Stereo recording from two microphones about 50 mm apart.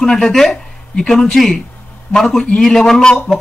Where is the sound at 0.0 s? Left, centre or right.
Centre.